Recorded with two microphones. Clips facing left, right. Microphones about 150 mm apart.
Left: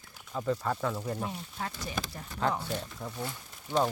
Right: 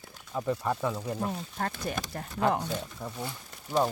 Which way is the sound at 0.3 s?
15° right (ahead or behind).